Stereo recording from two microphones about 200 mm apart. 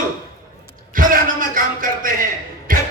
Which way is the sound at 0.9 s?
45° right (ahead or behind).